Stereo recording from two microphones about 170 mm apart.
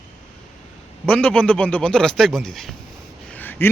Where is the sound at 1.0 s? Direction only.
5° left (ahead or behind).